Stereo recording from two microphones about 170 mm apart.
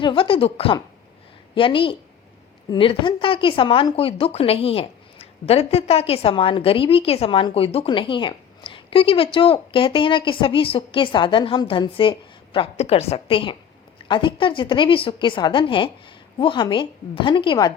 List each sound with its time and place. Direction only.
0.0 s a woman's voice: 30° left (ahead or behind)